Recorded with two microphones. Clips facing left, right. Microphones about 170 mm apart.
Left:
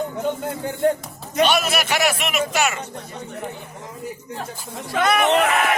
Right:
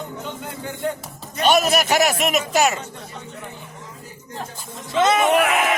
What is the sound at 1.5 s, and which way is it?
A man's voice, 40° right (ahead or behind).